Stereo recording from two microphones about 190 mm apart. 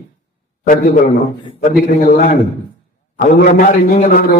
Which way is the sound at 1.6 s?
40° left (ahead or behind).